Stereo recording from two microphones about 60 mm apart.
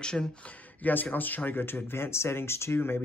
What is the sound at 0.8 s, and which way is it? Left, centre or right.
Speech, left.